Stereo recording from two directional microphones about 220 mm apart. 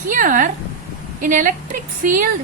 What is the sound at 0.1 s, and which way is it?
Speech, 35° right (ahead or behind).